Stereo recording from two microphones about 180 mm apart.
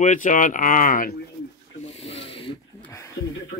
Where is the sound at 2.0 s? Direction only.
30° left (ahead or behind).